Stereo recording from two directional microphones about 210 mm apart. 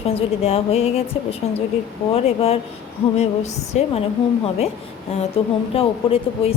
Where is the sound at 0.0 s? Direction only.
30° left (ahead or behind).